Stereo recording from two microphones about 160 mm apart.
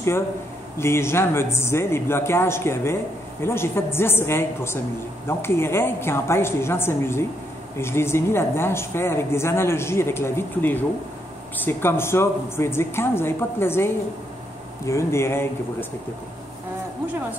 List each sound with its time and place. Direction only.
0.7 s speech: 15° left (ahead or behind)